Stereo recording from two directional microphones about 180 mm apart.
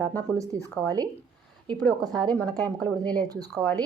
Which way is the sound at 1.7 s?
5° left (ahead or behind).